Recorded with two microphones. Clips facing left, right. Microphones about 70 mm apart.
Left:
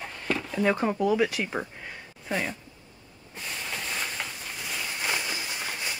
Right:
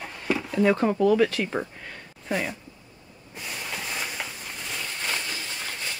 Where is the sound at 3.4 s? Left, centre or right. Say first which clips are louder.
Right 1 dB; centre.